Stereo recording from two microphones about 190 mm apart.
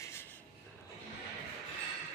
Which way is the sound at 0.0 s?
15° left (ahead or behind).